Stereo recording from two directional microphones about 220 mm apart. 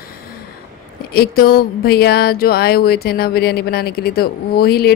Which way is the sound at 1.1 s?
45° left (ahead or behind).